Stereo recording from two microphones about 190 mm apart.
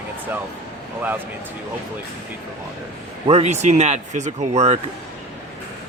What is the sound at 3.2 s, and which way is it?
Speech, 35° right (ahead or behind).